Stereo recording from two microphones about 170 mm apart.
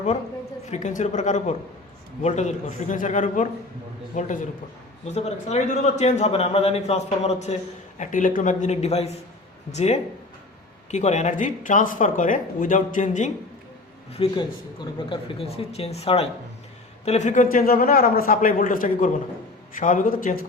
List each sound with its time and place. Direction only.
0.7 s a man's voice: 45° left (ahead or behind)
14.1 s a man's voice: 30° left (ahead or behind); by 20.4 s 55° left (ahead or behind)